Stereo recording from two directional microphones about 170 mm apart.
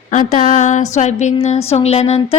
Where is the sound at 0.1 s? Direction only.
45° left (ahead or behind).